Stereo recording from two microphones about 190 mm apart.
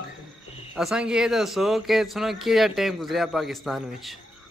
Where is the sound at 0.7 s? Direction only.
5° right (ahead or behind).